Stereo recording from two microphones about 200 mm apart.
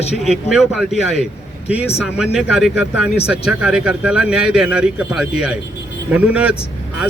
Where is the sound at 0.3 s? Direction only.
Centre (ahead or behind).